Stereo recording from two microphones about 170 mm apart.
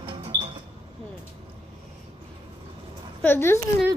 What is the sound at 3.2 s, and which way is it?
Speech, 15° left (ahead or behind).